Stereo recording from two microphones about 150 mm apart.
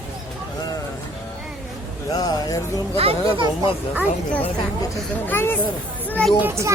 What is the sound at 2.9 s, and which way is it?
Speech, 40° right (ahead or behind).